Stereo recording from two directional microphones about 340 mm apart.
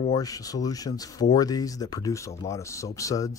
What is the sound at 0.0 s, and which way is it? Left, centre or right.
Speech, centre.